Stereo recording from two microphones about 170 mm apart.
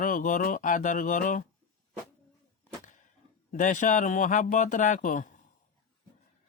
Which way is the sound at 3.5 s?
50° left (ahead or behind).